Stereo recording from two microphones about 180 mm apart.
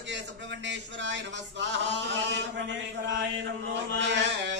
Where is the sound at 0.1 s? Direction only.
80° right.